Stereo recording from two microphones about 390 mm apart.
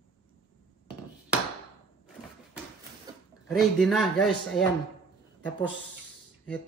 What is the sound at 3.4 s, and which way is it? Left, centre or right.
Speech, centre.